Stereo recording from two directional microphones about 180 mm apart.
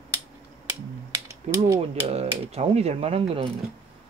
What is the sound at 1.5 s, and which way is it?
Speech, 40° right (ahead or behind).